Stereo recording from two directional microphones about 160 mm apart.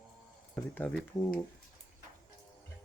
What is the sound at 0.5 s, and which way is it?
Speech, 10° left (ahead or behind).